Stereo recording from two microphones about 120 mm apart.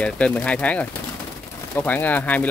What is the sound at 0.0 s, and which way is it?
Speech, 10° left (ahead or behind).